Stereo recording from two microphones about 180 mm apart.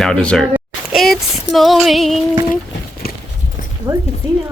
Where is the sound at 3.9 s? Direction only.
15° right (ahead or behind).